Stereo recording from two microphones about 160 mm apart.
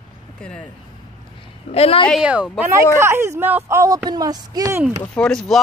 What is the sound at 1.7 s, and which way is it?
Speech, 40° left (ahead or behind).